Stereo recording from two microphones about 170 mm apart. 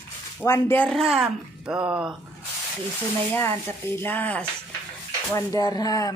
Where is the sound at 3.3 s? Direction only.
10° left (ahead or behind).